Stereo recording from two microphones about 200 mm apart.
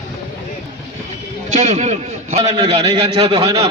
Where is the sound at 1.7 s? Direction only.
35° right (ahead or behind).